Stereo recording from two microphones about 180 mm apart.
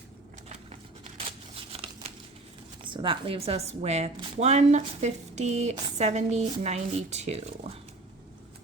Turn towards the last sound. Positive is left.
turn(degrees=-35)  # may be behind; listen again after turning